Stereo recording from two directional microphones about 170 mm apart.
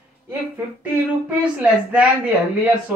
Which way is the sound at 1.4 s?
5° right (ahead or behind).